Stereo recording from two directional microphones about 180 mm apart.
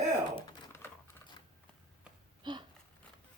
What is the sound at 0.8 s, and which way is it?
Typing, 10° left (ahead or behind).